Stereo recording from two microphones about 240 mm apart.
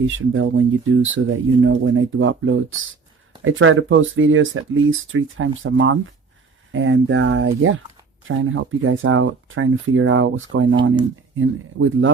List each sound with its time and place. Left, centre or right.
0.3 s speech: right